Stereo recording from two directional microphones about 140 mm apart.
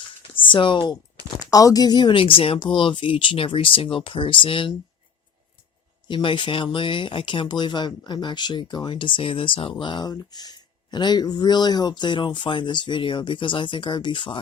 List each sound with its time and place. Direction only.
0.3 s speech: 35° left (ahead or behind)
1.5 s speech: 25° left (ahead or behind)
6.1 s speech: 35° left (ahead or behind)